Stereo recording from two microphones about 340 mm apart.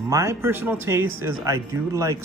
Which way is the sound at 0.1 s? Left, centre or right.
Centre.